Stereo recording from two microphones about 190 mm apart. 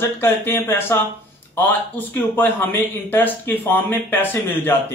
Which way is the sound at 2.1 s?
10° left (ahead or behind).